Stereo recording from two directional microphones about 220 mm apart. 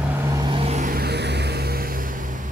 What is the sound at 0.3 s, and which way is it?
Vehicle, 20° right (ahead or behind).